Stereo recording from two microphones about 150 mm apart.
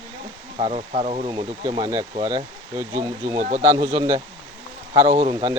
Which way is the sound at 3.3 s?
55° right (ahead or behind).